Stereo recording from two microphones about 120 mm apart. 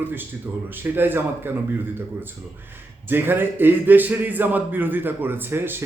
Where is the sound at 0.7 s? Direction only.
15° right (ahead or behind).